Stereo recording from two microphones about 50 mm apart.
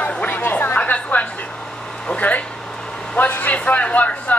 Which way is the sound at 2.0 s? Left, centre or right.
Left.